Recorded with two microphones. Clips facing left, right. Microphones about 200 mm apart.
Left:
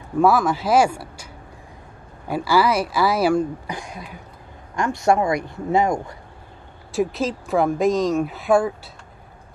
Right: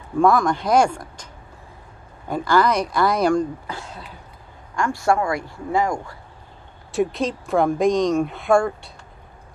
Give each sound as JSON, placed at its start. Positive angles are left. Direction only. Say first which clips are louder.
{"t": 0.2, "sound": "speech", "louder": "even", "side_deg": 5}
{"t": 6.9, "sound": "speech", "louder": "even", "side_deg": 0}